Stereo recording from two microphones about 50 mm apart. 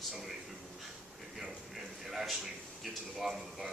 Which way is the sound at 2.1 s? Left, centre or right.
Centre.